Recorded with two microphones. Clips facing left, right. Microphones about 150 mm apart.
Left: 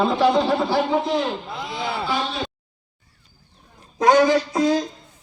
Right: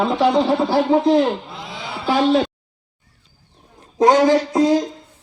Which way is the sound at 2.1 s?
90° right.